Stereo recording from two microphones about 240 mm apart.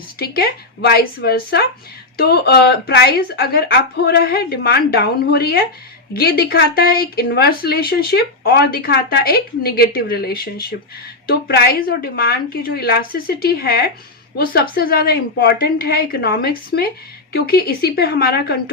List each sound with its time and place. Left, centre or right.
0.2 s speech: left